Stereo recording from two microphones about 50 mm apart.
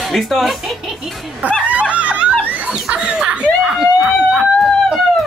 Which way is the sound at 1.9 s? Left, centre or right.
Right.